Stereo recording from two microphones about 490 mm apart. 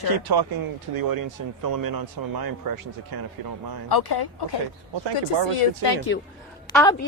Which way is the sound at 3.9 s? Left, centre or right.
Left.